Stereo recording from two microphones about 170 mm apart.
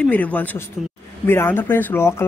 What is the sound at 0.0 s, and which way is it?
Speech, 10° left (ahead or behind).